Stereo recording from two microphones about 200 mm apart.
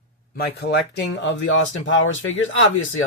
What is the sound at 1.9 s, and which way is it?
Speech, 80° left.